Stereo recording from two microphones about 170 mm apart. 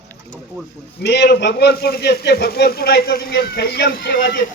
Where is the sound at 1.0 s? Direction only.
75° left (ahead or behind).